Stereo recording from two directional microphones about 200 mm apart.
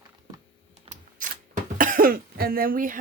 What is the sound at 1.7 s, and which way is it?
Speech, 45° right (ahead or behind).